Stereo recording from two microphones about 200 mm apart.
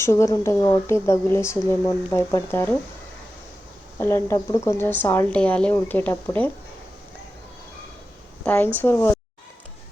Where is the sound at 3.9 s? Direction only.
15° left (ahead or behind).